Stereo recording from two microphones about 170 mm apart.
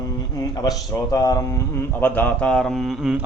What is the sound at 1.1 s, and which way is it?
Speech, 20° left (ahead or behind).